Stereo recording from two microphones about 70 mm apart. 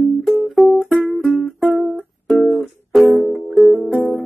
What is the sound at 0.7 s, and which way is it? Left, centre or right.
Music, left.